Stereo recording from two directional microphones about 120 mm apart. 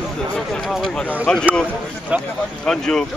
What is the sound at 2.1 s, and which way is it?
Speech, 10° right (ahead or behind).